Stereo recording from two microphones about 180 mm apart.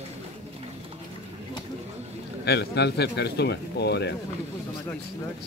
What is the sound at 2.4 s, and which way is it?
A man's voice, 65° left (ahead or behind).